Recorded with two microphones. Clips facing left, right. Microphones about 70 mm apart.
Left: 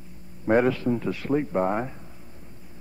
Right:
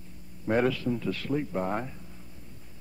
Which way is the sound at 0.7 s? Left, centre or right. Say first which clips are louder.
Left 4 dB; left.